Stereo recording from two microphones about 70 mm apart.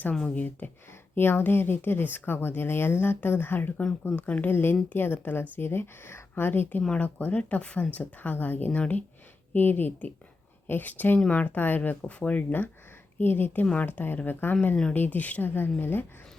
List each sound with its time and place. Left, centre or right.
0.3 s speech: left